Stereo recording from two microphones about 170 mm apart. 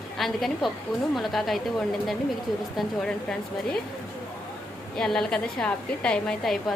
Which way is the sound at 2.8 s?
5° left (ahead or behind).